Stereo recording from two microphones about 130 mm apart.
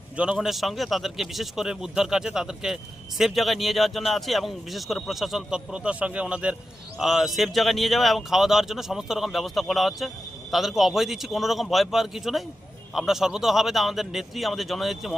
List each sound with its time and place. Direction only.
0.2 s a man's voice: 5° right (ahead or behind)